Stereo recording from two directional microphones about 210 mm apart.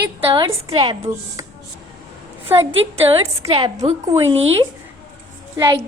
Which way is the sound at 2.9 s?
30° right (ahead or behind).